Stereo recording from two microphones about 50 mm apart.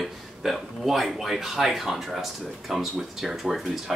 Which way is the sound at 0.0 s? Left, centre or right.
Centre.